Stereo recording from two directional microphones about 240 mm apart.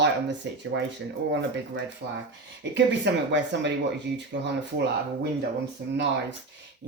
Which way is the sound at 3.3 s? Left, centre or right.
Right.